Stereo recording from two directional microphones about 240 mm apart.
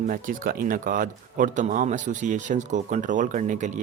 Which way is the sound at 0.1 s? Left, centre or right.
Right.